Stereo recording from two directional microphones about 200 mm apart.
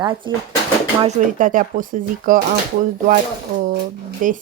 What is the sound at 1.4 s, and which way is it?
Speech, 45° right (ahead or behind).